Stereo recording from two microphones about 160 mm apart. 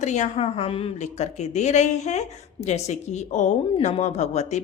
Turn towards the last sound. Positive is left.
turn(degrees=45)  # may be behind; listen again after turning